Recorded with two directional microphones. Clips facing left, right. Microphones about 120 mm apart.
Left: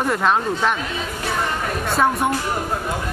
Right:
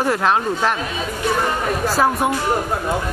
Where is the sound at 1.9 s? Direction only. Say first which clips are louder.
Even; centre (ahead or behind).